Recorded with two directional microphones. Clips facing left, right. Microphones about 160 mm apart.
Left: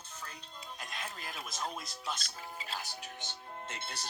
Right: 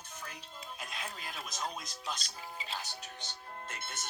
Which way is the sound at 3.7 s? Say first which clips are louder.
Left 1 dB; 30° left (ahead or behind).